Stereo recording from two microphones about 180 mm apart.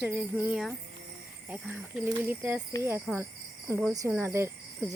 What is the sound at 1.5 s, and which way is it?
Cricket, 10° right (ahead or behind).